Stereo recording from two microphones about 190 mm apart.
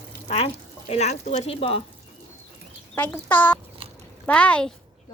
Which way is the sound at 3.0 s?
10° left (ahead or behind).